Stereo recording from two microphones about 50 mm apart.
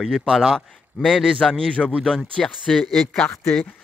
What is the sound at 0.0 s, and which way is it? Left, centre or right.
Speech, centre.